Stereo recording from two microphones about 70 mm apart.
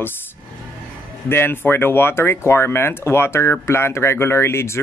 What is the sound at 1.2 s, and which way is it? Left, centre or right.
Speech, left.